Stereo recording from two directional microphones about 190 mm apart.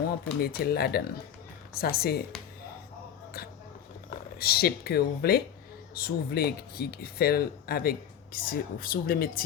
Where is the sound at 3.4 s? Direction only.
55° left (ahead or behind).